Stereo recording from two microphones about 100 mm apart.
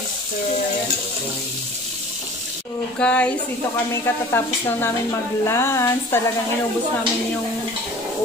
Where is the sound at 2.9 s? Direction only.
10° left (ahead or behind).